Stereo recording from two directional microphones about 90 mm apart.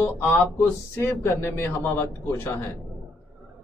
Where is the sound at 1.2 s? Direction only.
25° left (ahead or behind).